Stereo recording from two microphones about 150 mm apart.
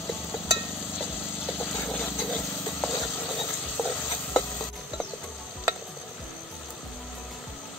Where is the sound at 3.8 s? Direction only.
20° left (ahead or behind).